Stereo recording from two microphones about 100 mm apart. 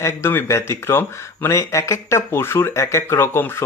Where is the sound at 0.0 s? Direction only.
25° left (ahead or behind).